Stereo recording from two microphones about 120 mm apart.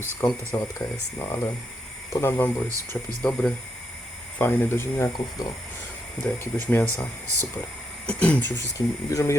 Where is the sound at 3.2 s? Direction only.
5° left (ahead or behind).